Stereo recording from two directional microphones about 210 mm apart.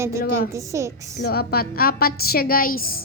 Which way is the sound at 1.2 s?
45° left (ahead or behind).